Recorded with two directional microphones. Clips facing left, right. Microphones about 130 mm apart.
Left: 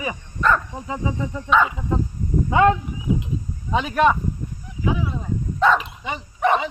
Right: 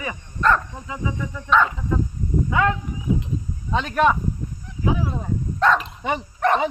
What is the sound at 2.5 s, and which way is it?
Wild animals, 25° left (ahead or behind).